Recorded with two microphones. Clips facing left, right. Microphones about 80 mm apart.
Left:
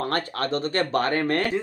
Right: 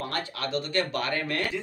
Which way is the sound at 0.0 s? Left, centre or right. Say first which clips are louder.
Left 6 dB; left.